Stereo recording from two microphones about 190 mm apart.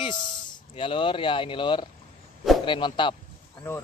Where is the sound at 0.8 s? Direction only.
30° left (ahead or behind).